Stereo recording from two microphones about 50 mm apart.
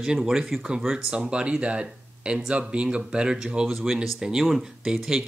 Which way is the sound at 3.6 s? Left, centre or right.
Centre.